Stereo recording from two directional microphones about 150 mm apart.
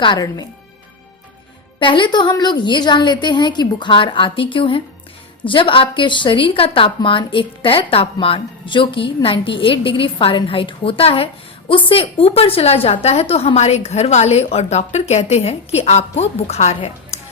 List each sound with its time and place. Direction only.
0.0 s speech: 30° left (ahead or behind)
1.8 s a woman's voice: 30° left (ahead or behind); by 17.2 s 45° left (ahead or behind)